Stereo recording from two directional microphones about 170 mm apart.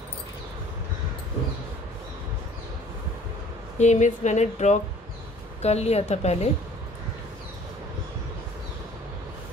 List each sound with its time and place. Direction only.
3.7 s a woman's voice: 40° left (ahead or behind)